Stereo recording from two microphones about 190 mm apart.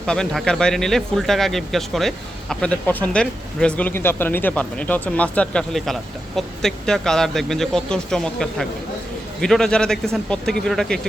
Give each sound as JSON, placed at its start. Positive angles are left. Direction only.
{"t": 0.0, "sound": "speech", "side_deg": 5}